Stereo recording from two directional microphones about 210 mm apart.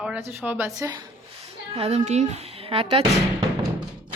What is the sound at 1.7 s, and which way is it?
A woman's voice, 30° right (ahead or behind).